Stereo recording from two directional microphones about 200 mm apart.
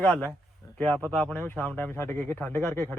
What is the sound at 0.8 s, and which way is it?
A man's voice, 10° left (ahead or behind).